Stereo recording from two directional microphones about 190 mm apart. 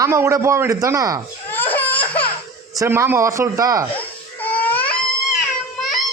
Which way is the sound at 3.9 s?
10° left (ahead or behind).